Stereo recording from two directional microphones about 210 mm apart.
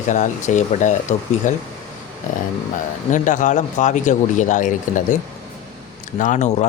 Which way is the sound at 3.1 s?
35° left (ahead or behind).